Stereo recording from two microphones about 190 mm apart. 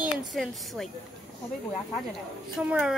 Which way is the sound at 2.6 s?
5° right (ahead or behind).